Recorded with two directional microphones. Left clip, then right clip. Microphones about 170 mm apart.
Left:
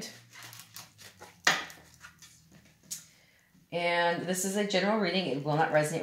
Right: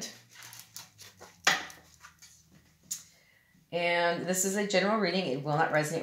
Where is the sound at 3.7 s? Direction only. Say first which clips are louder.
Even; 30° right (ahead or behind).